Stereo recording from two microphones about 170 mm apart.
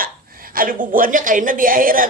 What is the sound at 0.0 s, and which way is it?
A woman's voice, 55° right (ahead or behind).